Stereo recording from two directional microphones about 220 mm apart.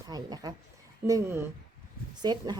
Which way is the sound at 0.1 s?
20° right (ahead or behind).